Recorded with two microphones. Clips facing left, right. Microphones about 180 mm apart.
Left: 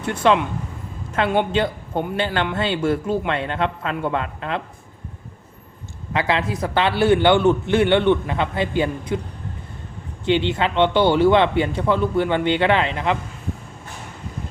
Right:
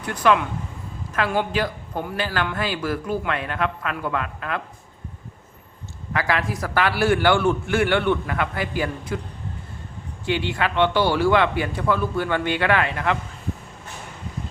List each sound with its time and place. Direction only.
0.0 s a man's voice: 25° left (ahead or behind)
6.1 s a man's voice: 25° left (ahead or behind)
10.2 s a man's voice: 25° left (ahead or behind)